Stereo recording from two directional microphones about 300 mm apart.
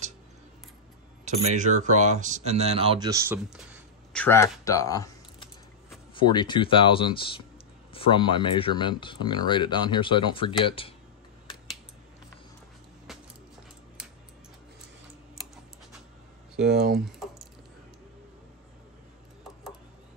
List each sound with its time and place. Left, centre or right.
1.2 s speech: right; by 11.0 s centre
16.6 s speech: right
17.0 s typing: centre